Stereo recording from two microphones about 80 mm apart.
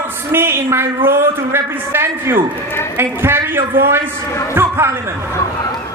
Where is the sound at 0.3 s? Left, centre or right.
Right.